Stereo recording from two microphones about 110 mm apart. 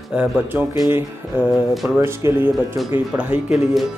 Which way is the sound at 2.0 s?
20° right (ahead or behind).